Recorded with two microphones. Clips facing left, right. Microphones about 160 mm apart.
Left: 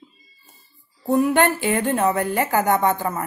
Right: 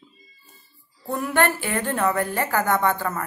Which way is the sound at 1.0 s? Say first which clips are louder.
Left 5 dB; 20° left (ahead or behind).